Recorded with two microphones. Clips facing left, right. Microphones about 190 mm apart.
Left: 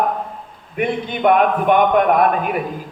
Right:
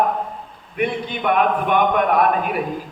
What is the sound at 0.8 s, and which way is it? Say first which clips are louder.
A man's voice: left 4 dB; 50° left (ahead or behind).